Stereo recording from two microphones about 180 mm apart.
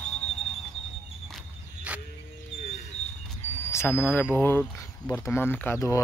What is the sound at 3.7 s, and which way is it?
Speech, 15° left (ahead or behind).